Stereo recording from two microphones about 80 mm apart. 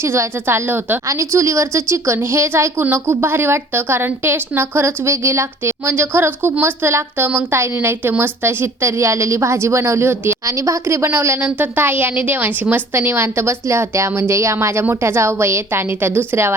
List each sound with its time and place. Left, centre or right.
0.0 s a woman's voice: right
10.4 s a woman's voice: right